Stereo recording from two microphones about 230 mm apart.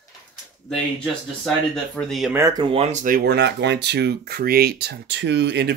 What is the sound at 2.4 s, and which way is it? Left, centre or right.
Speech, centre.